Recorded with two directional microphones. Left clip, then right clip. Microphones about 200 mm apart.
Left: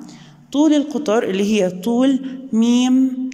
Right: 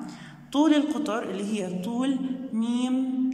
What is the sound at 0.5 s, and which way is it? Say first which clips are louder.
A man's voice: left 6 dB; 20° left (ahead or behind).